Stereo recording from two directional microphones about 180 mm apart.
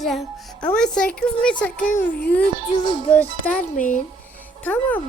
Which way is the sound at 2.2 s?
10° left (ahead or behind).